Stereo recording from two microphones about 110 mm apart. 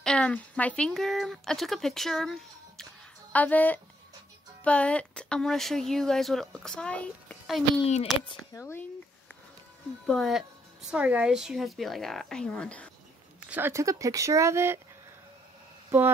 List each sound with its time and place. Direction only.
0.0 s a woman's voice: 10° left (ahead or behind)
3.3 s a woman's voice: 15° left (ahead or behind)
7.4 s a woman's voice: centre (ahead or behind)
7.8 s speech: 65° left (ahead or behind)
8.5 s speech: 25° left (ahead or behind)
10.0 s a woman's voice: centre (ahead or behind)
13.5 s speech: 20° right (ahead or behind)